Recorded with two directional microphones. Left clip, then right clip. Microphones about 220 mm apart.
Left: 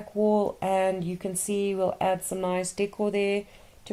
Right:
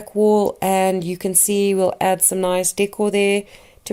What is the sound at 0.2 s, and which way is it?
Speech, 45° right (ahead or behind).